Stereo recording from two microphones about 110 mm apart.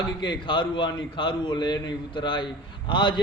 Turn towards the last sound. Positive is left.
turn(degrees=45)  # may be behind; listen again after turning